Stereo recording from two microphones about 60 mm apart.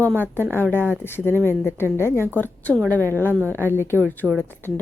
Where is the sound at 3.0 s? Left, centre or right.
Right.